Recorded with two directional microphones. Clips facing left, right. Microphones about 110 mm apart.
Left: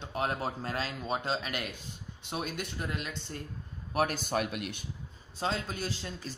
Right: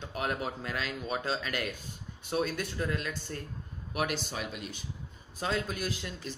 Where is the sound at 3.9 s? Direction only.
40° left (ahead or behind); by 4.8 s 60° left (ahead or behind).